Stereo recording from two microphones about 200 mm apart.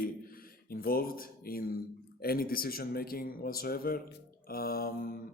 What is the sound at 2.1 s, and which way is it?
A man's voice, 50° left (ahead or behind).